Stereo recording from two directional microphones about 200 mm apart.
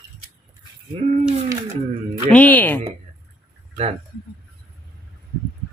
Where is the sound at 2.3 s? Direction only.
10° left (ahead or behind).